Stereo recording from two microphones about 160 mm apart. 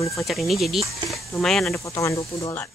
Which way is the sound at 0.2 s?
Centre (ahead or behind).